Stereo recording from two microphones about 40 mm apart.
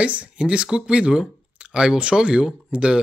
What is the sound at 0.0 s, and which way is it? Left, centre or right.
Speech, right.